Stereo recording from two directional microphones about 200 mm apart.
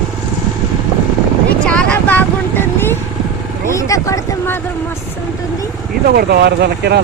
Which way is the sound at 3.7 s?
15° left (ahead or behind).